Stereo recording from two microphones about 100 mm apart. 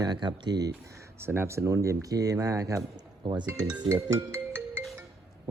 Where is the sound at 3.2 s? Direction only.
50° right (ahead or behind).